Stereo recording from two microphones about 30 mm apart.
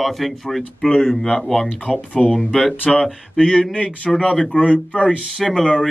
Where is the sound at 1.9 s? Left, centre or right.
Left.